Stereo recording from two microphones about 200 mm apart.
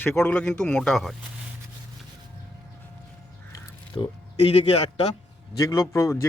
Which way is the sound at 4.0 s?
15° left (ahead or behind).